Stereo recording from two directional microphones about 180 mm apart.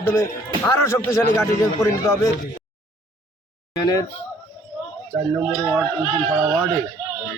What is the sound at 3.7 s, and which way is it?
Speech, 20° left (ahead or behind).